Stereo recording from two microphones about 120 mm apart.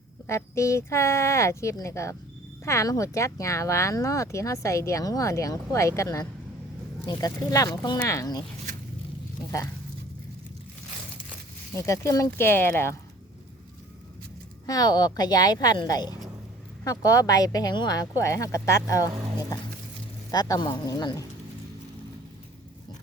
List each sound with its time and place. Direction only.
0.3 s a woman's voice: 25° left (ahead or behind)
11.7 s speech: 25° left (ahead or behind)
14.7 s a woman's voice: 35° left (ahead or behind)
20.3 s a woman's voice: 30° left (ahead or behind)